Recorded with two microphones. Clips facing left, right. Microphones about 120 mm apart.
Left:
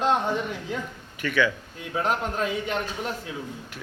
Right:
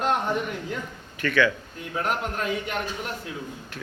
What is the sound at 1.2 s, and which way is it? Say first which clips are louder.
Speech: right 2 dB; 10° left (ahead or behind).